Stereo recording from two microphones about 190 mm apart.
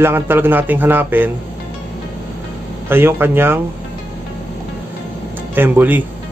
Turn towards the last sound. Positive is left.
turn(degrees=-10)  # may be behind; listen again after turning